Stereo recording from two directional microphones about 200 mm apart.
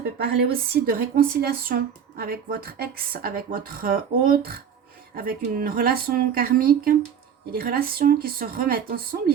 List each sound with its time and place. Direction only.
0.3 s speech: 50° right (ahead or behind)